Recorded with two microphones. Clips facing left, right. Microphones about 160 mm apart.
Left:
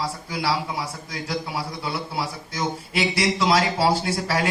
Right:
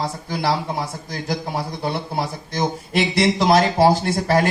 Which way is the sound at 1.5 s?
55° right (ahead or behind).